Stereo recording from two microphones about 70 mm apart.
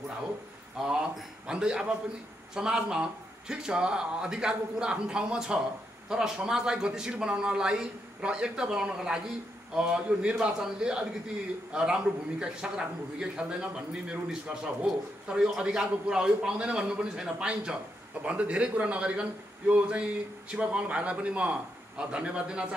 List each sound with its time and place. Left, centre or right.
0.8 s a man's voice: centre